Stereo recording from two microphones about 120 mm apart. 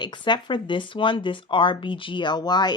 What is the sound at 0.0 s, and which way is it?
Speech, 40° left (ahead or behind).